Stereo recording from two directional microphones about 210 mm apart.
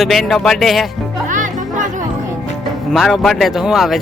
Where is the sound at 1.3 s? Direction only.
35° right (ahead or behind).